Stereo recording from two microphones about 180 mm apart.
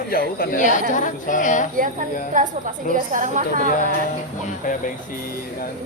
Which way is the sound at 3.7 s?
50° left (ahead or behind).